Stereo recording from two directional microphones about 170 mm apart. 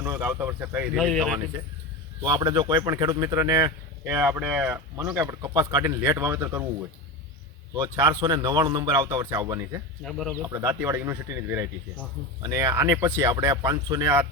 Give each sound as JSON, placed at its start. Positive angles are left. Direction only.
{"t": 0.0, "sound": "a man's voice", "side_deg": -15}
{"t": 0.9, "sound": "speech", "side_deg": 0}
{"t": 2.2, "sound": "a man's voice", "side_deg": -25}
{"t": 7.8, "sound": "speech", "side_deg": -15}
{"t": 10.0, "sound": "speech", "side_deg": 0}
{"t": 10.4, "sound": "a man's voice", "side_deg": -20}